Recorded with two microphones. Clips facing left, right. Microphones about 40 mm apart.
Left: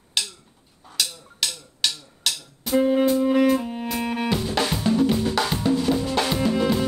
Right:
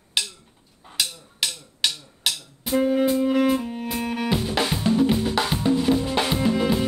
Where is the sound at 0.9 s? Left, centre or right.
Centre.